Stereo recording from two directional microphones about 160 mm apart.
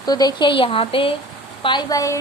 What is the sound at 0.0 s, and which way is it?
A woman's voice, 25° left (ahead or behind).